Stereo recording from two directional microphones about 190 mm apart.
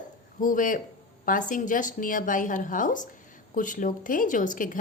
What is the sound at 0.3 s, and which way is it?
A woman's voice, 45° left (ahead or behind).